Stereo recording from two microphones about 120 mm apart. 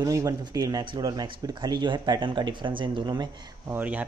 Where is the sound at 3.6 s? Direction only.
15° right (ahead or behind).